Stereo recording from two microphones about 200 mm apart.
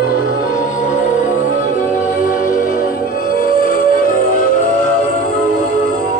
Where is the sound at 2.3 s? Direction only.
40° left (ahead or behind).